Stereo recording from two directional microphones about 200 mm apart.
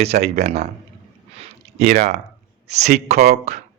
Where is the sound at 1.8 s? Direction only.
50° right (ahead or behind).